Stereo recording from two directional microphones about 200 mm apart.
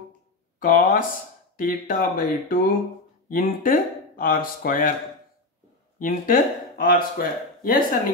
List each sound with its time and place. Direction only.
0.6 s speech: 45° left (ahead or behind)
5.9 s speech: 45° left (ahead or behind)